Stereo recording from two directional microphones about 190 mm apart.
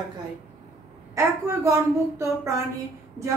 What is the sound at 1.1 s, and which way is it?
A man's voice, 15° right (ahead or behind).